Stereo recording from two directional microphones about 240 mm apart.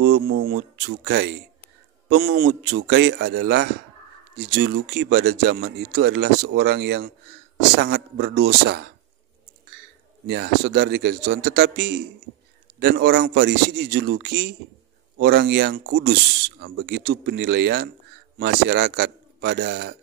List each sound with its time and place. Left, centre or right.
0.0 s speech: right
10.2 s speech: right